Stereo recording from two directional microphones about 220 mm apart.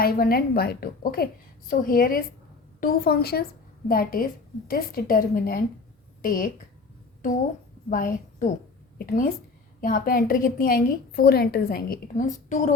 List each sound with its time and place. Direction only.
0.0 s a woman's voice: 40° left (ahead or behind)
7.9 s a woman's voice: 40° left (ahead or behind)